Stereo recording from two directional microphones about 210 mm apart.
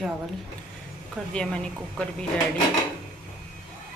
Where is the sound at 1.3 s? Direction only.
5° left (ahead or behind).